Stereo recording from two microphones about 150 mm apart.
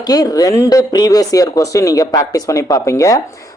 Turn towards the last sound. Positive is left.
turn(degrees=20)  # may be behind; listen again after turning